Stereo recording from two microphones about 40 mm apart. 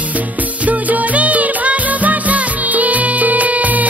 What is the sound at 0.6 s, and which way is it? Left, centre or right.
Music, right.